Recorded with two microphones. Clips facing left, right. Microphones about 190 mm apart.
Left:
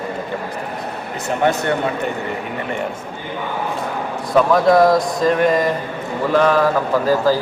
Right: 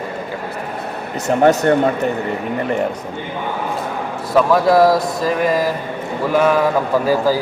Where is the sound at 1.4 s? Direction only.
40° right (ahead or behind).